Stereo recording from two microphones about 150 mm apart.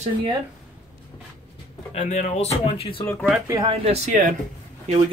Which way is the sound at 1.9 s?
50° left (ahead or behind).